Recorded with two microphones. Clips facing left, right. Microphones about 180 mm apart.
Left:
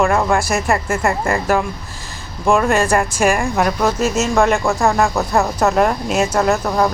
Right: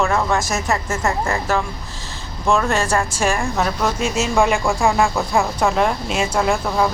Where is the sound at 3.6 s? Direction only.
5° left (ahead or behind).